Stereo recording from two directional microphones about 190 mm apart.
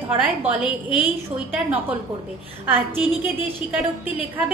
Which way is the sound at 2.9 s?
10° right (ahead or behind).